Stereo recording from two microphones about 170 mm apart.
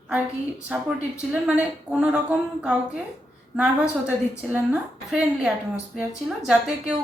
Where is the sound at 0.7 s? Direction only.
5° right (ahead or behind).